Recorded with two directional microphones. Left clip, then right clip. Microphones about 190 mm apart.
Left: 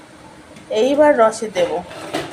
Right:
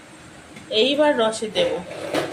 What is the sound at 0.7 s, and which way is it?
Speech, 35° left (ahead or behind).